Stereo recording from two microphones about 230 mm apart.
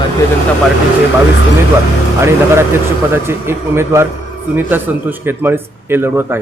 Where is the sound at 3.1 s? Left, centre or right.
Centre.